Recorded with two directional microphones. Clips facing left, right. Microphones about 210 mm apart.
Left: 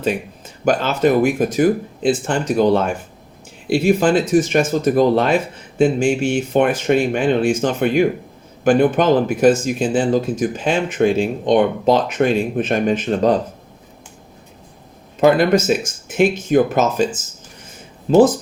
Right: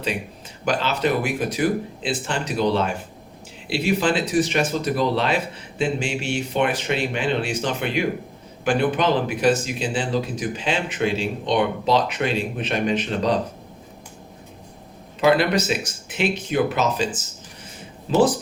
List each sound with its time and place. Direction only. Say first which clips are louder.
0.6 s speech: left 6 dB; 50° left (ahead or behind)
15.2 s speech: left 5 dB; 45° left (ahead or behind)
18.1 s speech: left 7 dB; 45° left (ahead or behind)